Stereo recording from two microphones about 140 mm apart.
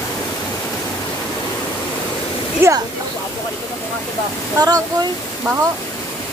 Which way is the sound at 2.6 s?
15° right (ahead or behind).